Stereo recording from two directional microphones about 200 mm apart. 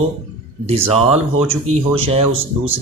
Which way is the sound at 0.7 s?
30° right (ahead or behind).